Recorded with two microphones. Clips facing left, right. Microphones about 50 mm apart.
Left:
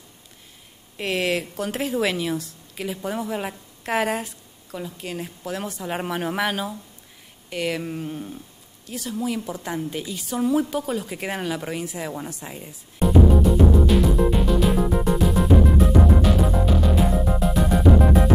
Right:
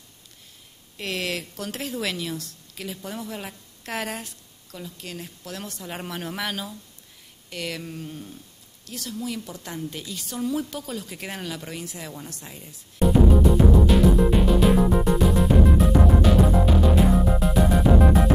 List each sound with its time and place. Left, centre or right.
0.9 s a woman's voice: centre
13.0 s music: centre